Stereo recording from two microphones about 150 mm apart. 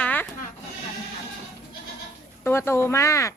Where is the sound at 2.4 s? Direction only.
15° left (ahead or behind).